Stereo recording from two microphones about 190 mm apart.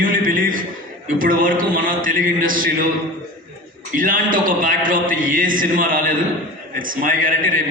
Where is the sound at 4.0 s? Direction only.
45° right (ahead or behind).